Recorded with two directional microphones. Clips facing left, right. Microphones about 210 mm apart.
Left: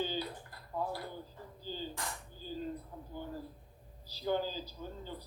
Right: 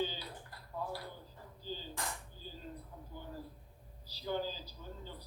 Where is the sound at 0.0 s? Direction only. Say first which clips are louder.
Left 2 dB; 45° left (ahead or behind).